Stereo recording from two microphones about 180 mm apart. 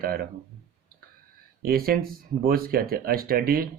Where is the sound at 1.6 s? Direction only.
55° right (ahead or behind).